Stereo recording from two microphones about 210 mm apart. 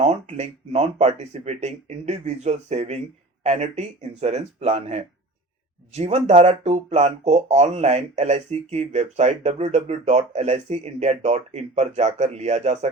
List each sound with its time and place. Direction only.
0.0 s speech: 35° right (ahead or behind)